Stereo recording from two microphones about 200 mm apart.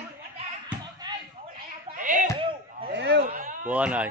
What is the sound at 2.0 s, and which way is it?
Speech, 40° right (ahead or behind).